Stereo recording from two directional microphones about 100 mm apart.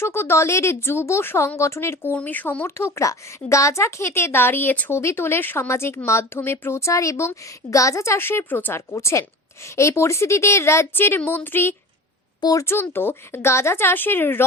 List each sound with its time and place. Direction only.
0.0 s a woman's voice: 25° left (ahead or behind)
12.4 s speech: 40° left (ahead or behind)
12.6 s a woman's voice: 20° left (ahead or behind)